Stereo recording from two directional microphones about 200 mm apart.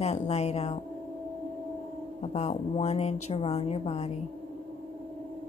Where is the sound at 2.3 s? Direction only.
30° left (ahead or behind).